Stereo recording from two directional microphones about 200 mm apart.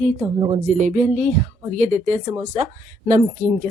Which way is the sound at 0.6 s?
40° right (ahead or behind).